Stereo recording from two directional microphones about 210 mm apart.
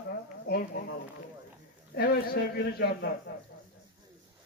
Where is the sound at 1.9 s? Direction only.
45° left (ahead or behind).